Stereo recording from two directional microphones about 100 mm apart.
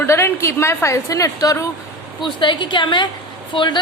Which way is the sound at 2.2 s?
50° left (ahead or behind).